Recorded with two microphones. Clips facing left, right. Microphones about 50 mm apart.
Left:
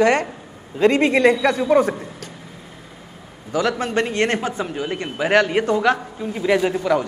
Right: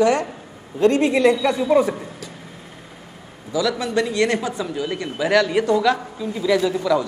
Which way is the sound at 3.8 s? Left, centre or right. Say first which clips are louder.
Even; left.